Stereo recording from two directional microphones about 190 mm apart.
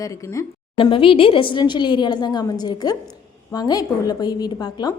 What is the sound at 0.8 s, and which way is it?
A woman's voice, 25° left (ahead or behind).